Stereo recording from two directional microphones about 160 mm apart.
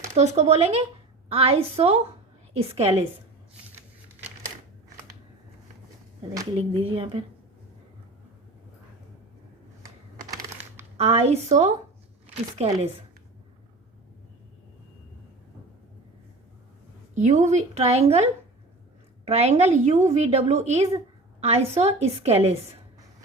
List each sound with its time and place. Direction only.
0.2 s a woman's voice: 45° right (ahead or behind)
6.6 s a woman's voice: 35° right (ahead or behind)
10.9 s a woman's voice: 40° right (ahead or behind)
17.2 s a woman's voice: 45° right (ahead or behind)